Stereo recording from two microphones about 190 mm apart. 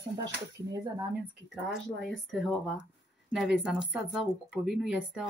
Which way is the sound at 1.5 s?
Centre (ahead or behind).